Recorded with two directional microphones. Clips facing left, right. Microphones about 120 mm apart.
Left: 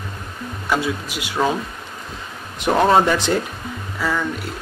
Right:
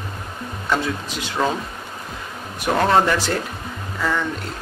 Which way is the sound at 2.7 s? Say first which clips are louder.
Left 2 dB; 10° left (ahead or behind).